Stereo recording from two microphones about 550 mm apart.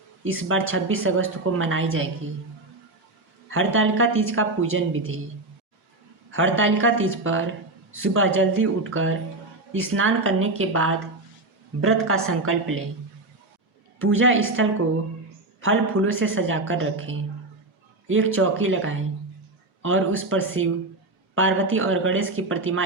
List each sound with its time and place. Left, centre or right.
0.3 s a woman's voice: right
3.5 s a woman's voice: right
6.3 s a woman's voice: right
14.0 s a woman's voice: right